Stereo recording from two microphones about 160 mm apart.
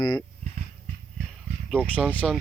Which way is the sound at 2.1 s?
5° left (ahead or behind).